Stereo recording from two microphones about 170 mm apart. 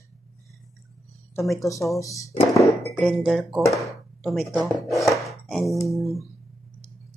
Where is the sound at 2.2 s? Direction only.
20° left (ahead or behind).